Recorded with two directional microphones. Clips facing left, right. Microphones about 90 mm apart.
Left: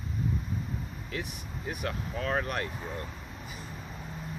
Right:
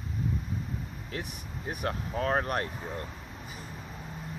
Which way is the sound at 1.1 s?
40° right (ahead or behind).